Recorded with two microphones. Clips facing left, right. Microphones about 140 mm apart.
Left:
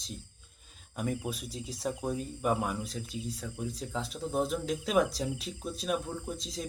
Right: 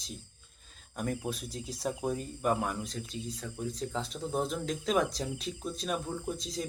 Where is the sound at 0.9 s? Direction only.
5° left (ahead or behind).